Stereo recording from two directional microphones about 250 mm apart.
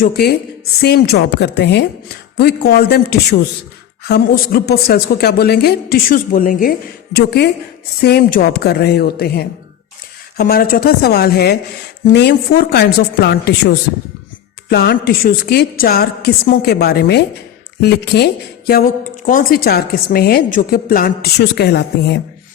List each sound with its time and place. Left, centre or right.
0.0 s a woman's voice: left